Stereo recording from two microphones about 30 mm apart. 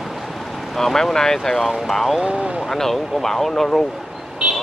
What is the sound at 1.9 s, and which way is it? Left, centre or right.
Speech, centre.